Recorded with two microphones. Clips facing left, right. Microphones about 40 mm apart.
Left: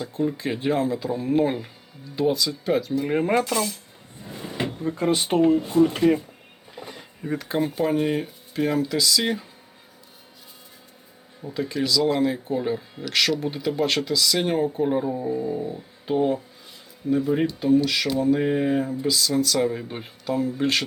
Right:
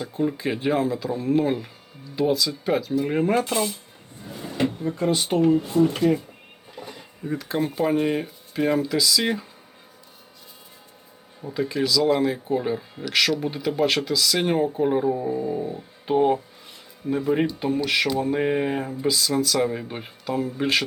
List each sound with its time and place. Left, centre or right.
0.0 s speech: centre
0.9 s speech: centre
3.4 s speech: right
4.2 s cupboard open or close: left
4.9 s speech: left
5.4 s speech: left
7.3 s speech: centre
7.6 s speech: centre
11.4 s speech: centre
15.5 s speech: right
16.0 s speech: right
17.8 s speech: right
18.2 s speech: right